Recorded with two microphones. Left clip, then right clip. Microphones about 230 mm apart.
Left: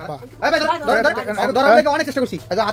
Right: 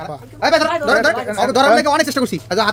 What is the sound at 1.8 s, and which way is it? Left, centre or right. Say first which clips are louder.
Speech: right 1 dB; right.